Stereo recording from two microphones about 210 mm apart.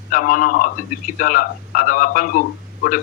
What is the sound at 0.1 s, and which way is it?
A man's voice, 40° left (ahead or behind).